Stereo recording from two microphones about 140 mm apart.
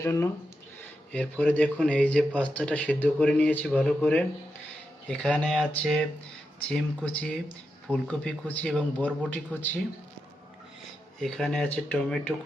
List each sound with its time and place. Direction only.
0.0 s speech: 20° left (ahead or behind)
11.2 s speech: centre (ahead or behind)